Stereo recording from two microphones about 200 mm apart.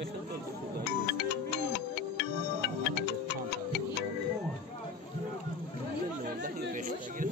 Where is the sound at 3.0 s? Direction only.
60° left (ahead or behind).